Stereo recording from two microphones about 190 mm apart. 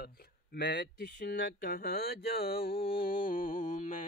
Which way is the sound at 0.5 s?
60° left (ahead or behind).